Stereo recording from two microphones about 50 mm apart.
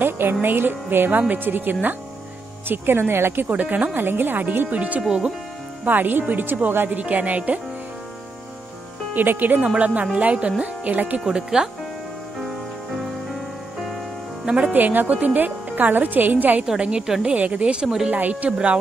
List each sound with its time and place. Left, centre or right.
0.0 s speech: right
3.4 s speech: right
3.9 s speech: right
7.0 s speech: right
9.1 s speech: right
9.8 s speech: right
11.1 s speech: centre
14.6 s speech: right
16.6 s speech: centre
17.3 s speech: right